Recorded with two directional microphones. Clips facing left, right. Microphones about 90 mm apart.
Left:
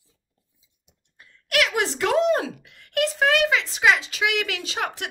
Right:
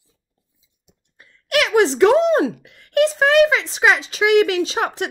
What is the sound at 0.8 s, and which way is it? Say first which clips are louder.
A woman's voice: right 2 dB; 25° right (ahead or behind).